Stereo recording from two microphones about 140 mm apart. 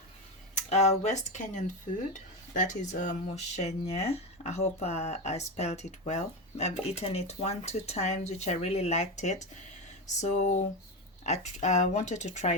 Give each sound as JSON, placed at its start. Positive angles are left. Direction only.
{"t": 0.7, "sound": "speech", "side_deg": 55}